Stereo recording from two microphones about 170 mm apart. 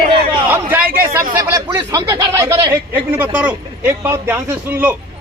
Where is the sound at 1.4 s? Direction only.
15° right (ahead or behind).